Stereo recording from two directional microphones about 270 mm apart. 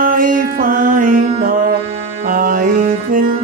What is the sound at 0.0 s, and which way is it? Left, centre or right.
Mantra, right.